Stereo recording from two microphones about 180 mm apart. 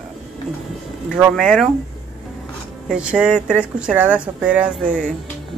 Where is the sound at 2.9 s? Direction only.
5° right (ahead or behind).